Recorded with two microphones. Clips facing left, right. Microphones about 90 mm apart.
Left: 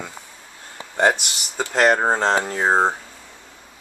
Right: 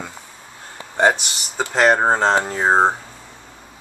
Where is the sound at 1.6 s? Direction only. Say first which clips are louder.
Right 2 dB; 25° right (ahead or behind).